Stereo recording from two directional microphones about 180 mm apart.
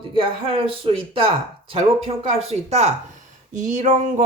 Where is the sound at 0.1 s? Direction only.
30° right (ahead or behind).